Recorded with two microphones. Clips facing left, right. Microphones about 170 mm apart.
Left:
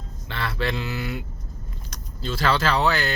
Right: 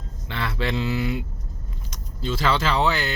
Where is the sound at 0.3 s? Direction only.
20° right (ahead or behind).